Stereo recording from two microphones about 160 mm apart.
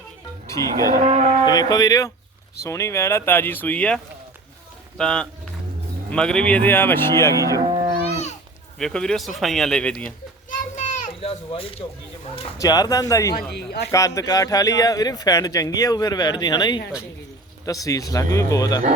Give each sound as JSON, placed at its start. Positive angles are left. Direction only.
{"t": 0.4, "sound": "music", "side_deg": 20}
{"t": 0.9, "sound": "cattle", "side_deg": -45}
{"t": 1.5, "sound": "speech", "side_deg": 25}
{"t": 8.8, "sound": "speech", "side_deg": 5}
{"t": 10.5, "sound": "children playing", "side_deg": 55}
{"t": 12.5, "sound": "speech", "side_deg": 25}
{"t": 13.5, "sound": "speech", "side_deg": 90}
{"t": 13.9, "sound": "speech", "side_deg": 20}